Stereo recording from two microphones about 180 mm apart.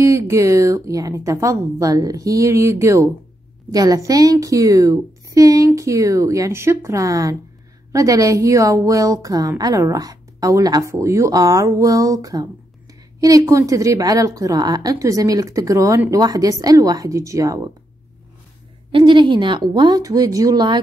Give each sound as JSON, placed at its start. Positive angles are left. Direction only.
{"t": 0.0, "sound": "a woman's voice", "side_deg": -15}
{"t": 18.9, "sound": "a woman's voice", "side_deg": -30}